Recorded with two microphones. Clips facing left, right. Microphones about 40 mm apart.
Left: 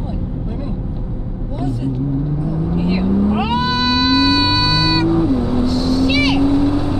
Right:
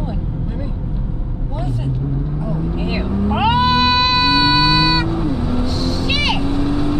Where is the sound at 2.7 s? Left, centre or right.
Right.